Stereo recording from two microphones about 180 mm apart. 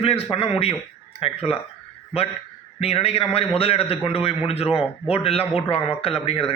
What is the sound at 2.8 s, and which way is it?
A man's voice, 35° left (ahead or behind).